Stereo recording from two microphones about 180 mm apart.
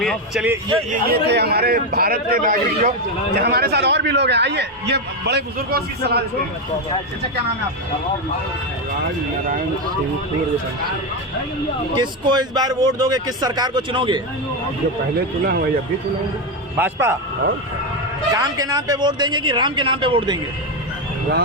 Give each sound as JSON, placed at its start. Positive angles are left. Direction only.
{"t": 0.0, "sound": "a man's voice", "side_deg": 0}
{"t": 0.9, "sound": "a man's voice", "side_deg": -60}
{"t": 11.9, "sound": "speech", "side_deg": -25}
{"t": 16.7, "sound": "a man's voice", "side_deg": -10}
{"t": 18.3, "sound": "speech", "side_deg": -20}